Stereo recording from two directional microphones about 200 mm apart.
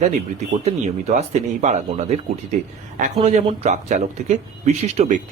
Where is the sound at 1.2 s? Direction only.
35° right (ahead or behind).